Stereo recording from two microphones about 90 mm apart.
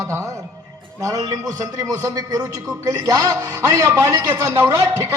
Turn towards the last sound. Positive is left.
turn(degrees=-40)  # may be behind; listen again after turning